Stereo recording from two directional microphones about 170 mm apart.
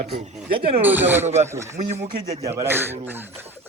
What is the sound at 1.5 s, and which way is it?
Speech, 15° right (ahead or behind).